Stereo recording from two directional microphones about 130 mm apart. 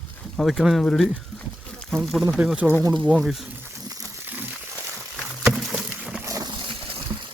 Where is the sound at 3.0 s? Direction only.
5° right (ahead or behind).